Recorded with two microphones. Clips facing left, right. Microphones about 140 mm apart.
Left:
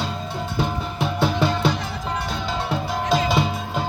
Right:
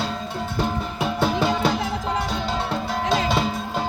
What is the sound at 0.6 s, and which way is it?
Music, centre (ahead or behind).